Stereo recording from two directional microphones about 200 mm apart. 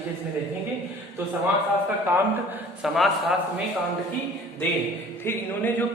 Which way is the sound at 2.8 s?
Centre (ahead or behind).